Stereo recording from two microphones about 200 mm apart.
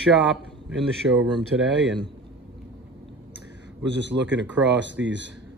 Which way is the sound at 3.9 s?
65° right (ahead or behind).